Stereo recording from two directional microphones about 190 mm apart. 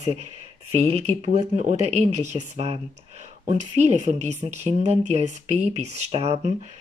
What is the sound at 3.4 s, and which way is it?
Speech, 35° right (ahead or behind).